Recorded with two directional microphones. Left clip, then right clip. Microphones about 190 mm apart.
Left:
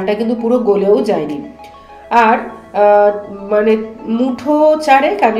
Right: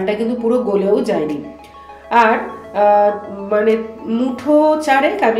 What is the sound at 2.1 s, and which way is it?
Music, 20° left (ahead or behind).